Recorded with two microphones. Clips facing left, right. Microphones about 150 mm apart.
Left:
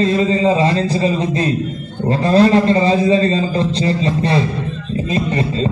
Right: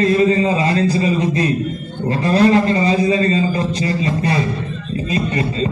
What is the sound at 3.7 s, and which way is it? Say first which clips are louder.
Speech: left 2 dB; 25° left (ahead or behind).